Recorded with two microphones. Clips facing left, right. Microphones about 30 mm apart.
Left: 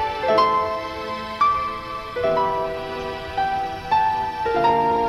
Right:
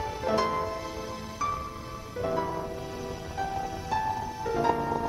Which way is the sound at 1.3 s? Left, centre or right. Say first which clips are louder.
Left 13 dB; left.